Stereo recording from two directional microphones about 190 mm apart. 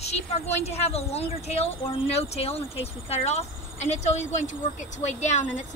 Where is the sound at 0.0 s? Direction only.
35° left (ahead or behind).